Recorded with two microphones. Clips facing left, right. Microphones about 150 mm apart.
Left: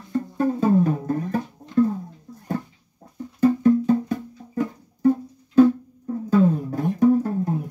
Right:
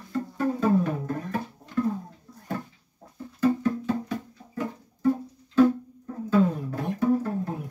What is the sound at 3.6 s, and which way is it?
Music, 45° left (ahead or behind).